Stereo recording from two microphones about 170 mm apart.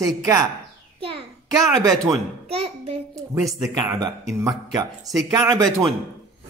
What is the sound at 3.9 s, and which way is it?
Speech, 15° right (ahead or behind).